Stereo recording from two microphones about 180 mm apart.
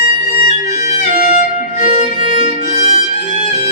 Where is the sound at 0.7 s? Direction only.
45° left (ahead or behind).